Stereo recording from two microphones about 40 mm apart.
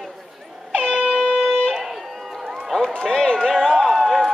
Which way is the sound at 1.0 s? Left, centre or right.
Centre.